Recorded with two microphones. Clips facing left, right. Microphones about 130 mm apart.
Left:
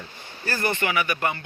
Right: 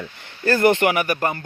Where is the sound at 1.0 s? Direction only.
40° right (ahead or behind).